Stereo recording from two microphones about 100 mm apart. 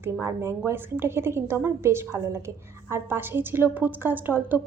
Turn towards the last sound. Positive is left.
turn(degrees=-20)  # may be behind; listen again after turning